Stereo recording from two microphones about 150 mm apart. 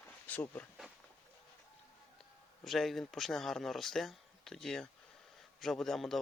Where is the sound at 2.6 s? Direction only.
Centre (ahead or behind).